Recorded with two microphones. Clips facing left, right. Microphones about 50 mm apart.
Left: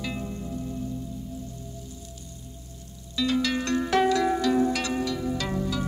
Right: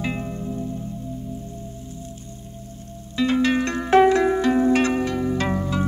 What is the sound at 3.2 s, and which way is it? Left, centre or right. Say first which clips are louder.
Music: right 6 dB; right.